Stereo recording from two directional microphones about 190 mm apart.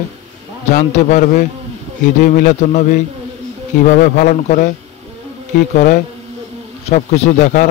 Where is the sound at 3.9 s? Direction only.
45° left (ahead or behind).